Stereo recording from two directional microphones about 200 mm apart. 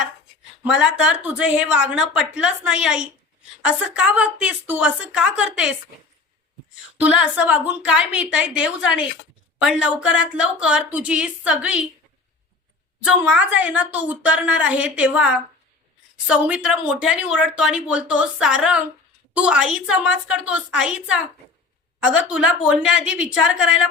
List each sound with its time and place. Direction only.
0.6 s speech: 5° right (ahead or behind)
7.0 s speech: 5° right (ahead or behind)
10.4 s speech: 5° right (ahead or behind)
13.1 s a woman's voice: 5° right (ahead or behind)
22.3 s speech: 5° right (ahead or behind)